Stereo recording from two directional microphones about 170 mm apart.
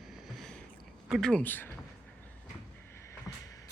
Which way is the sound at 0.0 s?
Centre (ahead or behind).